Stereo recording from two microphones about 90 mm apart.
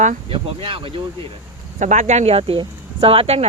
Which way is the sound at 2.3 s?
80° right.